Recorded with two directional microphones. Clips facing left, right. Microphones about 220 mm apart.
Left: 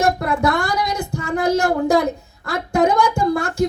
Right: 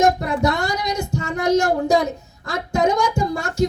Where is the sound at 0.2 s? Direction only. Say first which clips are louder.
Left 1 dB; 55° left (ahead or behind).